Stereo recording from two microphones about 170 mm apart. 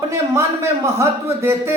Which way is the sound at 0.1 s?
15° right (ahead or behind).